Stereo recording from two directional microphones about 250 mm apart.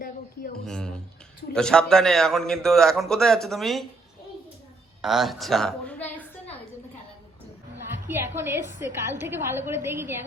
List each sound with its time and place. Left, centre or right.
0.0 s a sound: left
0.6 s a man's voice: centre
5.0 s a woman's voice: centre
8.0 s a woman's voice: centre